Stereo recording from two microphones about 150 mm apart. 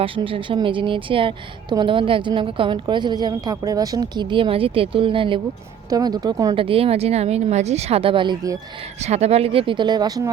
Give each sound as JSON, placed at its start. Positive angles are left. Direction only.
{"t": 0.0, "sound": "a woman's voice", "side_deg": -35}
{"t": 6.5, "sound": "a woman's voice", "side_deg": -35}
{"t": 9.0, "sound": "a woman's voice", "side_deg": -45}